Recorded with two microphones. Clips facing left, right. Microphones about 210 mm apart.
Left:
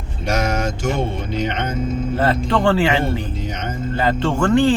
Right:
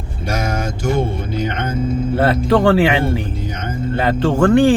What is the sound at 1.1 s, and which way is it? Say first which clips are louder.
Speech: right 1 dB; 10° right (ahead or behind).